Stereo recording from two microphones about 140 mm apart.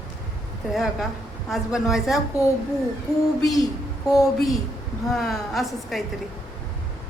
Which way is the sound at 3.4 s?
25° left (ahead or behind).